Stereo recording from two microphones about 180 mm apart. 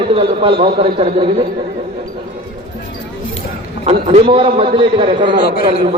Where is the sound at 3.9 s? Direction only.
35° right (ahead or behind).